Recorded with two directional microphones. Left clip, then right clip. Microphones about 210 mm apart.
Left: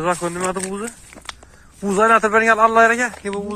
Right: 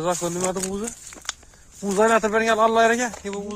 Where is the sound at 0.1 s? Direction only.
20° right (ahead or behind).